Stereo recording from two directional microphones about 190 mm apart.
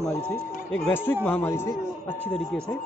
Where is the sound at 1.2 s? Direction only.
10° left (ahead or behind).